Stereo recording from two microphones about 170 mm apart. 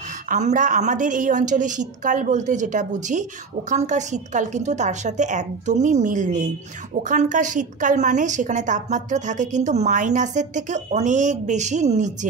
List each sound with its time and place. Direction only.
0.3 s a woman's voice: 45° right (ahead or behind)